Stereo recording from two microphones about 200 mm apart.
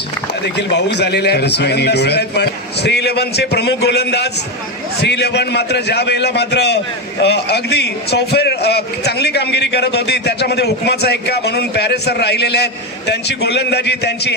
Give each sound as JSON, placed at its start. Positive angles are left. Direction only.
{"t": 0.6, "sound": "a man's voice", "side_deg": 60}